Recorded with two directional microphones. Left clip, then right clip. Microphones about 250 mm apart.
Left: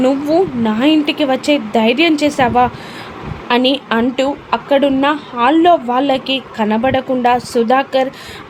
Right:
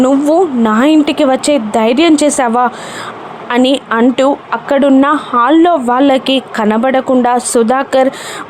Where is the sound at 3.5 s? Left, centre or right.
Right.